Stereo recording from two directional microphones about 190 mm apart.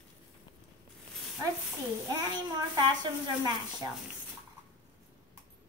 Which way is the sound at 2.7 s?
20° right (ahead or behind).